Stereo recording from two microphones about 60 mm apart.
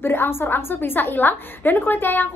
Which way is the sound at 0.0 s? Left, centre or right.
Left.